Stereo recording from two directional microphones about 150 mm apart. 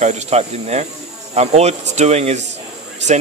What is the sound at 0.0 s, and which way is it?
Speech, 50° right (ahead or behind).